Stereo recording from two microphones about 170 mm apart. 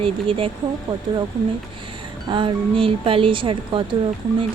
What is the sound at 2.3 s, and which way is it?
Speech, 30° right (ahead or behind).